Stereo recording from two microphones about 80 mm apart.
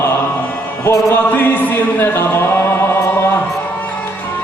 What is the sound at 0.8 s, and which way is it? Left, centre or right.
Music, left.